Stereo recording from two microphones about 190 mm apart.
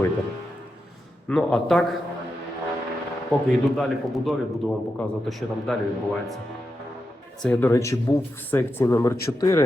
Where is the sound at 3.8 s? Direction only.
5° left (ahead or behind).